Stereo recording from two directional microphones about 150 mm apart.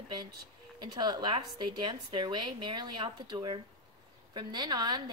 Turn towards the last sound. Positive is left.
turn(degrees=-30)  # may be behind; listen again after turning